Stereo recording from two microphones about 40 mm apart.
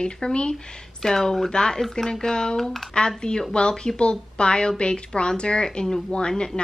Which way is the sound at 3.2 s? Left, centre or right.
Centre.